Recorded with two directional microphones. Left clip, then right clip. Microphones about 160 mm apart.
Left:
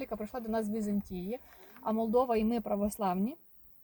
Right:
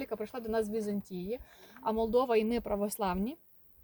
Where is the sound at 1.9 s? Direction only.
20° right (ahead or behind).